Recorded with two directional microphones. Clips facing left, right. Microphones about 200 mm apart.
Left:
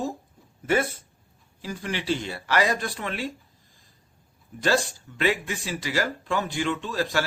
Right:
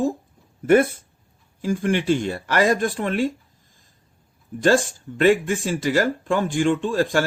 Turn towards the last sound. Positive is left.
turn(degrees=-50)  # may be behind; listen again after turning